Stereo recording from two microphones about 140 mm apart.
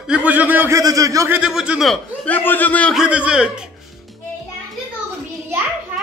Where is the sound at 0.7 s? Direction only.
25° right (ahead or behind).